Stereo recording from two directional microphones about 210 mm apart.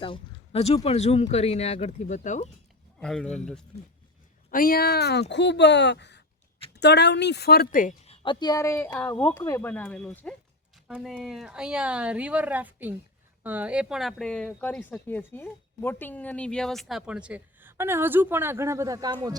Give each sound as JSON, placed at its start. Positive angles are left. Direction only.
{"t": 0.0, "sound": "speech", "side_deg": 25}
{"t": 3.0, "sound": "speech", "side_deg": 5}
{"t": 4.5, "sound": "a woman's voice", "side_deg": 45}
{"t": 10.8, "sound": "speech", "side_deg": -5}